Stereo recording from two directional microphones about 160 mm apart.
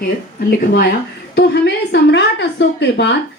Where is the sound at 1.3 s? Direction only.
90° left.